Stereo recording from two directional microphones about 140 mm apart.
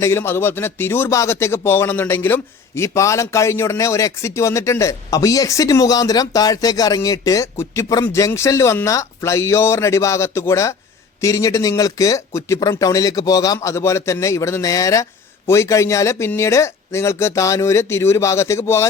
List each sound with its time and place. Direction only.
0.0 s speech: 15° left (ahead or behind)